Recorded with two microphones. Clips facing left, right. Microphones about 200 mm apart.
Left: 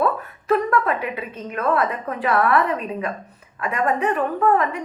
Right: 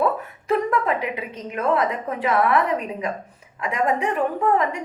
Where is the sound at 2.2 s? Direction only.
15° right (ahead or behind).